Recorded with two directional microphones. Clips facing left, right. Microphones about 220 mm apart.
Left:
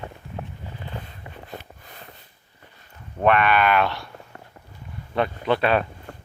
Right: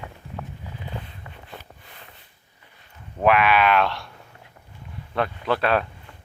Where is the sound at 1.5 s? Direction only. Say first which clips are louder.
Left 4 dB; 40° left (ahead or behind).